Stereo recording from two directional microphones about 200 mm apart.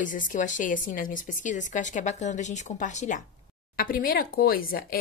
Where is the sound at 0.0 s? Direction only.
40° left (ahead or behind).